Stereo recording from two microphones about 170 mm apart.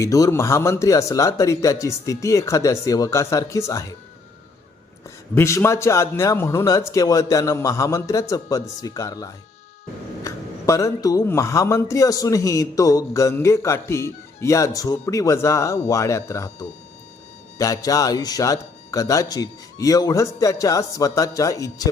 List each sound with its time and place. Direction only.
0.0 s speech: 20° left (ahead or behind)
5.3 s speech: 15° left (ahead or behind)